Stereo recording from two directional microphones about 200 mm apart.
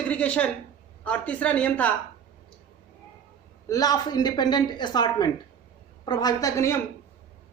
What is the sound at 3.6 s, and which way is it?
A woman's voice, 20° left (ahead or behind).